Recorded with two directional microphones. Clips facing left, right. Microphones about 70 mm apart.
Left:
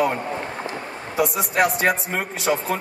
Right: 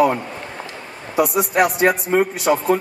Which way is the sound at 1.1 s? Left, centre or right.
Centre.